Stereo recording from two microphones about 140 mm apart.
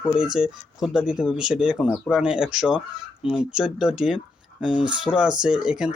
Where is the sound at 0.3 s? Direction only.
5° right (ahead or behind).